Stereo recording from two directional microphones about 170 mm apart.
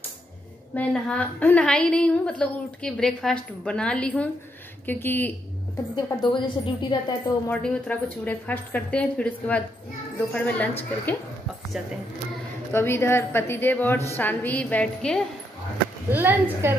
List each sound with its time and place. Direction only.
0.7 s a woman's voice: 5° left (ahead or behind)
6.0 s a woman's voice: 30° left (ahead or behind)
7.4 s a woman's voice: 5° left (ahead or behind)
11.8 s speech: 5° right (ahead or behind)
12.7 s a woman's voice: 15° left (ahead or behind)
16.1 s a woman's voice: 10° right (ahead or behind)